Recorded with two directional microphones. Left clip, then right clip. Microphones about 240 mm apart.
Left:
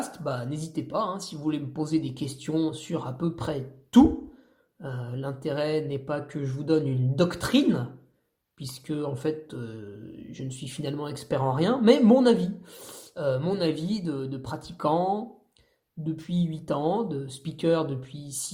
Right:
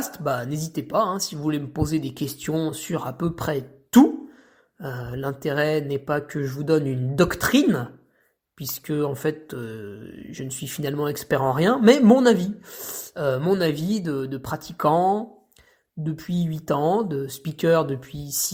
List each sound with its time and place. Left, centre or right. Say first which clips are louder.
0.1 s speech: right 6 dB; right